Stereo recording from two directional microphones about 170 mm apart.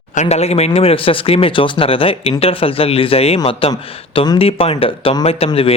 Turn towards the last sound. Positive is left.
turn(degrees=35)  # may be behind; listen again after turning